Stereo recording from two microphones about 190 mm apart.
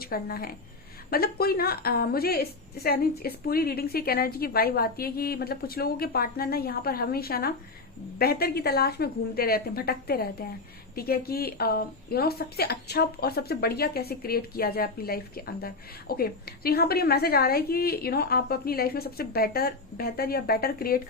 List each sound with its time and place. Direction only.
0.0 s a woman's voice: 50° left (ahead or behind)